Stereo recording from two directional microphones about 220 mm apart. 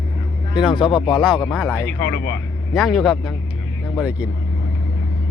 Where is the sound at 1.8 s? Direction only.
10° left (ahead or behind).